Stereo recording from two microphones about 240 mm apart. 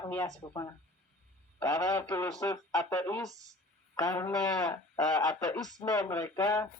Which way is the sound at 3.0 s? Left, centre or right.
Centre.